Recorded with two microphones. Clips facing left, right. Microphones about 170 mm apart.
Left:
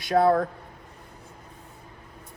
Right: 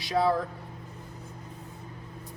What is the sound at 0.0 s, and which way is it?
Speech, 55° left (ahead or behind).